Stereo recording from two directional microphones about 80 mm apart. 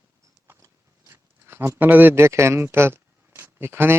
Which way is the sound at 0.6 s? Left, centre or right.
Right.